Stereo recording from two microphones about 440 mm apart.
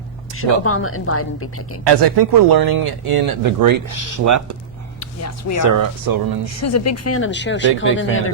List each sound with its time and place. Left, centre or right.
0.3 s speech: left
1.8 s speech: right
4.9 s speech: left
5.7 s speech: right
6.6 s speech: left